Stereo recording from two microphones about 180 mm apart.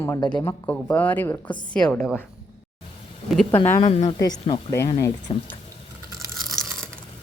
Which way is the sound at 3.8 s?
35° left (ahead or behind).